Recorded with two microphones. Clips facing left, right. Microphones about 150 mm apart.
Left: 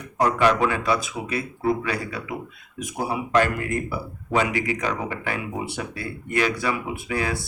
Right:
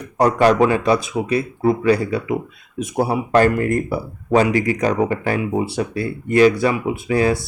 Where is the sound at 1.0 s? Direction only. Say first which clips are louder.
Right 8 dB; 25° right (ahead or behind).